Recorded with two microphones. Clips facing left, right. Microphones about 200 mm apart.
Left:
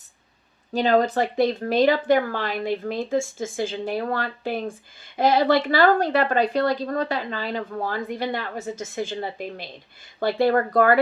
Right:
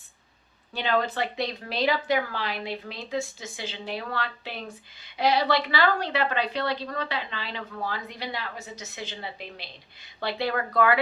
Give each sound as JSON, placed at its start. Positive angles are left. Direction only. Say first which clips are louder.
{"t": 0.7, "sound": "a woman's voice", "louder": "left 7 dB", "side_deg": 40}